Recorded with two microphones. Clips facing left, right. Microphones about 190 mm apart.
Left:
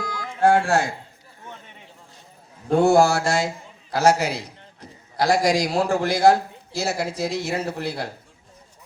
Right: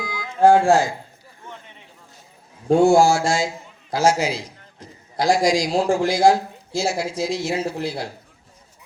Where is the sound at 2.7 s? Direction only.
60° left (ahead or behind).